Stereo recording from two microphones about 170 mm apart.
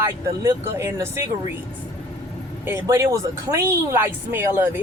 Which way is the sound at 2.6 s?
15° right (ahead or behind).